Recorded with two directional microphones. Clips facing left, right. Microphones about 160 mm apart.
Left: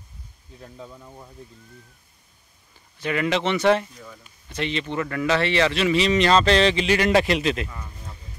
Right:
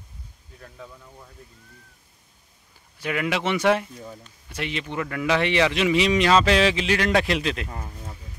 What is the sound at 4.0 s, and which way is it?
Speech, 30° right (ahead or behind).